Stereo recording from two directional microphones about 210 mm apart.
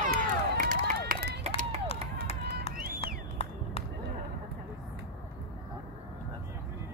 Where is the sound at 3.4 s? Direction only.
30° left (ahead or behind).